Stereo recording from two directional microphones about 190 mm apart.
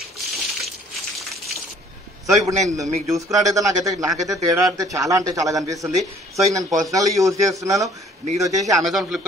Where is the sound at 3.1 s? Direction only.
15° right (ahead or behind).